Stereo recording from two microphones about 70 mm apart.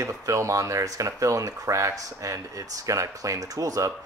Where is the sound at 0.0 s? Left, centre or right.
Right.